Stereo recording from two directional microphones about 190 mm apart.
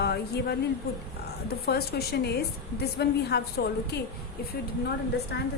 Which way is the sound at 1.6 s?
55° left (ahead or behind).